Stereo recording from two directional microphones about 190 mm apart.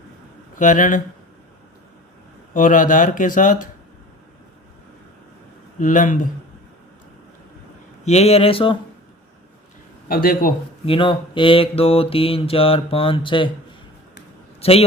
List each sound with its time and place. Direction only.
0.5 s speech: 45° left (ahead or behind)
2.5 s speech: 45° left (ahead or behind)
5.8 s speech: 45° left (ahead or behind)
8.0 s mantra: 35° left (ahead or behind)
10.1 s speech: 50° left (ahead or behind)
10.8 s mantra: 25° left (ahead or behind)
14.6 s a man's voice: 30° left (ahead or behind)